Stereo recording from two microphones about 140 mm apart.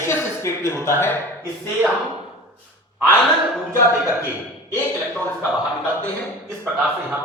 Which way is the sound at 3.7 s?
20° left (ahead or behind).